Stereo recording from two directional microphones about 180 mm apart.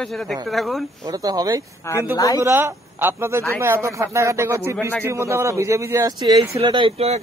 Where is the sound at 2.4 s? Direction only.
10° right (ahead or behind); by 7.1 s 30° right (ahead or behind).